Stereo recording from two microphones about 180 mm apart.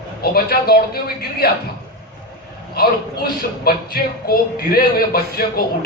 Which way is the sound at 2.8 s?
60° left (ahead or behind).